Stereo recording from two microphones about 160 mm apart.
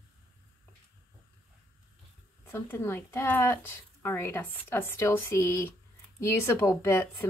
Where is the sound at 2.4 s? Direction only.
15° left (ahead or behind).